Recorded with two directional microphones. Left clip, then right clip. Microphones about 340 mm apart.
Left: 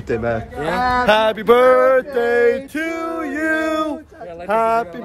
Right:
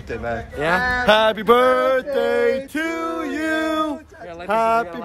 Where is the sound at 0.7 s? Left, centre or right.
Centre.